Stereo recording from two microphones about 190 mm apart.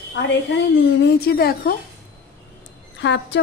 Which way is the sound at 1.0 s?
55° left (ahead or behind).